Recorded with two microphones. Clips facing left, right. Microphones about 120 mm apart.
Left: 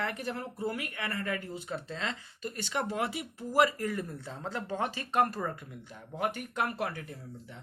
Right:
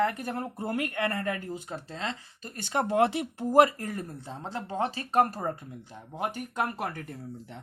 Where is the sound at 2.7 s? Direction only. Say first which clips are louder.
Right 9 dB; 45° right (ahead or behind).